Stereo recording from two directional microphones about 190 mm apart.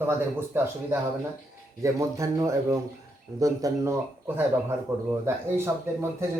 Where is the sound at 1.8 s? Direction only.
15° right (ahead or behind).